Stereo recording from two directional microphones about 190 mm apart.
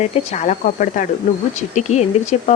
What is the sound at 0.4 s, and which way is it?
Speech, 45° left (ahead or behind).